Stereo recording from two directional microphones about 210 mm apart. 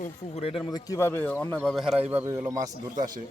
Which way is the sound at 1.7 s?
Centre (ahead or behind).